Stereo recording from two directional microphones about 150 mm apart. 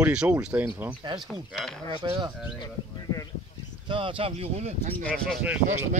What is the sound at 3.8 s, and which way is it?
Speech, 35° right (ahead or behind).